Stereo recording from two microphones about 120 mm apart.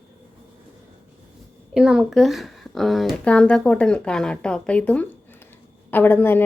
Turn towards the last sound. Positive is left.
turn(degrees=15)  # may be behind; listen again after turning